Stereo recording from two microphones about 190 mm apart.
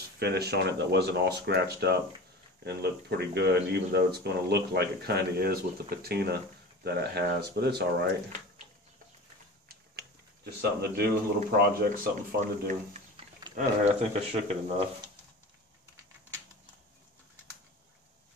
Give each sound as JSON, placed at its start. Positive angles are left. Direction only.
{"t": 0.2, "sound": "speech", "side_deg": -60}
{"t": 10.6, "sound": "speech", "side_deg": -55}